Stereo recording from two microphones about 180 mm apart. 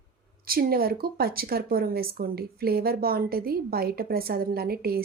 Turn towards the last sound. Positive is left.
turn(degrees=-55)  # may be behind; listen again after turning